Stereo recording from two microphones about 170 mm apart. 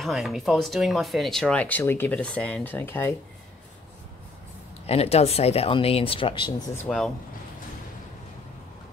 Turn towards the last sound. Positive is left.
turn(degrees=5)  # may be behind; listen again after turning